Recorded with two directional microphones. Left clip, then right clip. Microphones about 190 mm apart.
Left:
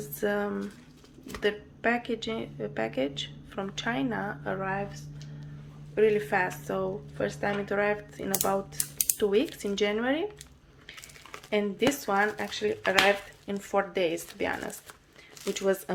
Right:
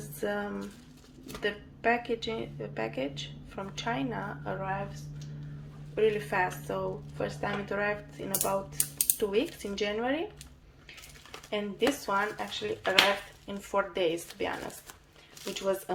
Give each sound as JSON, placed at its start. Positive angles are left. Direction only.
{"t": 0.2, "sound": "a woman's voice", "side_deg": 30}
{"t": 5.9, "sound": "a woman's voice", "side_deg": 35}
{"t": 11.5, "sound": "a woman's voice", "side_deg": 35}
{"t": 15.5, "sound": "speech", "side_deg": 40}